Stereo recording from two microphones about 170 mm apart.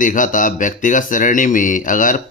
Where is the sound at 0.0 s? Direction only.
50° left (ahead or behind).